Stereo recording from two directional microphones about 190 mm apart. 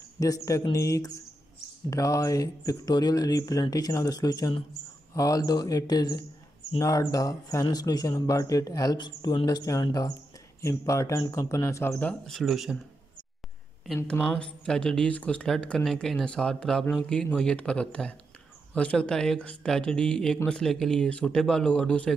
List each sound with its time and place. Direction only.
0.2 s speech: 15° left (ahead or behind); by 12.7 s centre (ahead or behind)
13.9 s speech: 5° left (ahead or behind)